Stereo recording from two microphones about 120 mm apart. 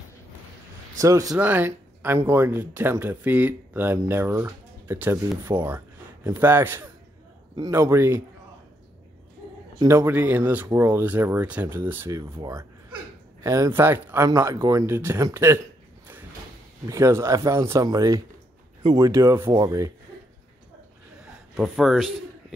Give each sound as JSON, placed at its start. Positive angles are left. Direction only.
{"t": 0.9, "sound": "speech", "side_deg": -30}
{"t": 1.3, "sound": "speech", "side_deg": -10}
{"t": 7.5, "sound": "speech", "side_deg": -30}
{"t": 9.8, "sound": "speech", "side_deg": -25}
{"t": 13.4, "sound": "speech", "side_deg": -25}
{"t": 16.8, "sound": "speech", "side_deg": -25}
{"t": 21.5, "sound": "a man's voice", "side_deg": 0}